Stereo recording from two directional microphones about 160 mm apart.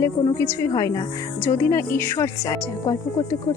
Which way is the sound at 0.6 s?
20° left (ahead or behind).